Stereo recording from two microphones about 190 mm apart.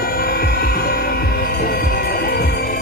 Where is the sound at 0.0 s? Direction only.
50° left (ahead or behind).